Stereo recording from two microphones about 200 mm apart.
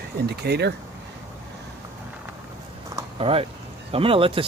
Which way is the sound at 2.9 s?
30° right (ahead or behind).